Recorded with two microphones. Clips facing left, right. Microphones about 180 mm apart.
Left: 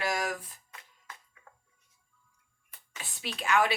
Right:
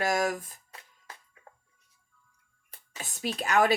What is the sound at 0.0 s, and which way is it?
Music, 45° right (ahead or behind).